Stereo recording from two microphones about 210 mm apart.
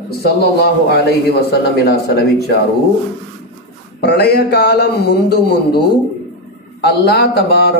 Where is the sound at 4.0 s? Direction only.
50° left (ahead or behind).